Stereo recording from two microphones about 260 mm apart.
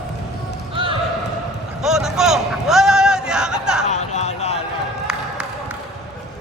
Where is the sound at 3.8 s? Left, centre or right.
Left.